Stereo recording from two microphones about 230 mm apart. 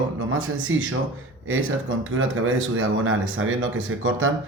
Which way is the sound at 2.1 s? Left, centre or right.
Right.